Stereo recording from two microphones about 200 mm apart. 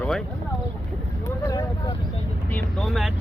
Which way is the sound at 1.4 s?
20° left (ahead or behind).